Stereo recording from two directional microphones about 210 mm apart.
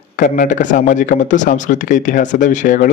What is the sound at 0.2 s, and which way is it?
A man's voice, 40° left (ahead or behind).